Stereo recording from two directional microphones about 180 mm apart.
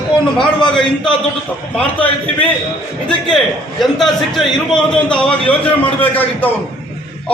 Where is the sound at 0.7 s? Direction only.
5° left (ahead or behind).